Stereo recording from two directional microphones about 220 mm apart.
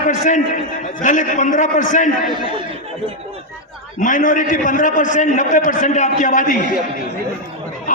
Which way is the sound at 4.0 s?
35° left (ahead or behind).